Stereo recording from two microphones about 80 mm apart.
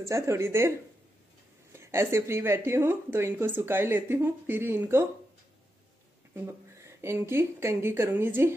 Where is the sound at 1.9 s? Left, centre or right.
Right.